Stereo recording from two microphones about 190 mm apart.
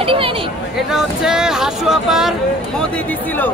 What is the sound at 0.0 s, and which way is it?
Chatter, 30° right (ahead or behind).